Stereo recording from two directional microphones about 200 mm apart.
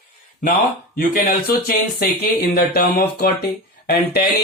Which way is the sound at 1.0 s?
45° left (ahead or behind).